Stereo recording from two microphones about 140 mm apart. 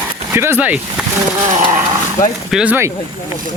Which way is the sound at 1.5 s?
65° right (ahead or behind).